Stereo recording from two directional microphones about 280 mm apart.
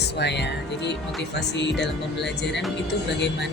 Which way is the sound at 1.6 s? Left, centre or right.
Left.